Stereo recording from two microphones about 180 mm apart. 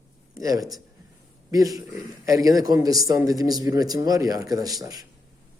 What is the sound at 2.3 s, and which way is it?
A man's voice, 20° right (ahead or behind).